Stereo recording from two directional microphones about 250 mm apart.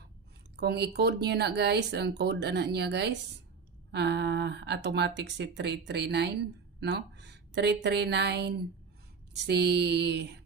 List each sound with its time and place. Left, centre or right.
0.6 s speech: right